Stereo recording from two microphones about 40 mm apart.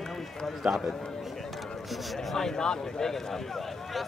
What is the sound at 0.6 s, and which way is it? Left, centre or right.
Speech, centre.